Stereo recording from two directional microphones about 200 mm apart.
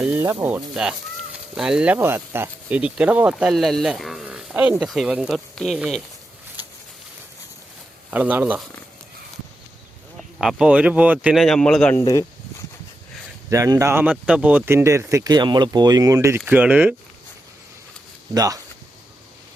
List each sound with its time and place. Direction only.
0.0 s speech: 10° right (ahead or behind)
8.1 s speech: 10° right (ahead or behind)
10.2 s speech: centre (ahead or behind)
13.5 s speech: 15° right (ahead or behind)
18.3 s speech: 20° right (ahead or behind)